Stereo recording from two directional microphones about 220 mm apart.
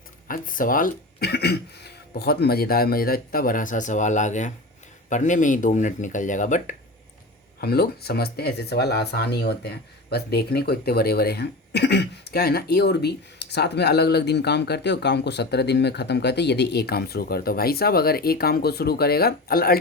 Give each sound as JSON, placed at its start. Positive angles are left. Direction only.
{"t": 0.3, "sound": "speech", "side_deg": 40}
{"t": 7.6, "sound": "speech", "side_deg": 45}